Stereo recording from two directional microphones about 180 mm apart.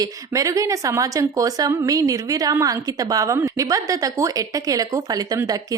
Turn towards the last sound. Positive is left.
turn(degrees=-20)  # may be behind; listen again after turning